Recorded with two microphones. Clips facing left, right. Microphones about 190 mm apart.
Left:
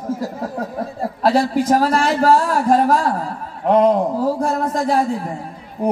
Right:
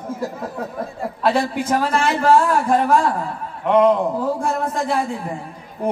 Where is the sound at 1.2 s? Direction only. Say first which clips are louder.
Left 3 dB; 40° left (ahead or behind).